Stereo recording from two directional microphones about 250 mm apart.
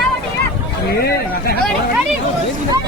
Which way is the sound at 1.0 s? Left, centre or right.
Left.